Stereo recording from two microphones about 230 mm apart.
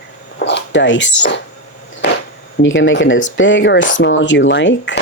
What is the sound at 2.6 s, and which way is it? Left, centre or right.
Speech, left.